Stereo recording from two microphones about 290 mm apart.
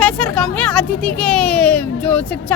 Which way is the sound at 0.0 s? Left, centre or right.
Centre.